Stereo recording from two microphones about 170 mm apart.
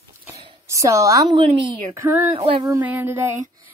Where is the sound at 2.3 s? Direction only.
30° right (ahead or behind).